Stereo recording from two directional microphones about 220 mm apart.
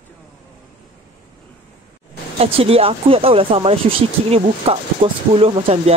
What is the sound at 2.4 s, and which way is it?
Speech, 25° right (ahead or behind).